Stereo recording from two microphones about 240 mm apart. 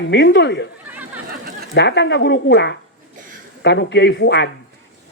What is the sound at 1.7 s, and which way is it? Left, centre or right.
A man's voice, left.